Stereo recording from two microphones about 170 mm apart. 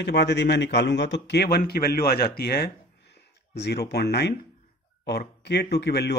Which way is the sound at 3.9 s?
75° left (ahead or behind).